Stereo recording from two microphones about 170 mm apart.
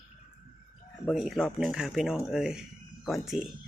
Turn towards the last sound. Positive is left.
turn(degrees=0)  # may be behind; listen again after turning